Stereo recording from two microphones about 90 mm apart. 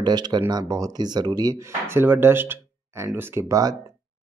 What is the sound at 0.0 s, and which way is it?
Speech, 50° right (ahead or behind).